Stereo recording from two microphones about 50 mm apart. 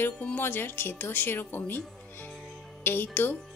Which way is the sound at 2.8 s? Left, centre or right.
Left.